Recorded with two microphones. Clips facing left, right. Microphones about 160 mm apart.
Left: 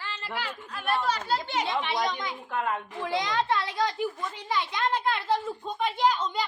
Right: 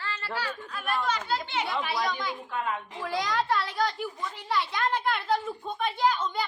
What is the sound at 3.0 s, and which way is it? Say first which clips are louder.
A woman's voice: left 1 dB; 20° left (ahead or behind).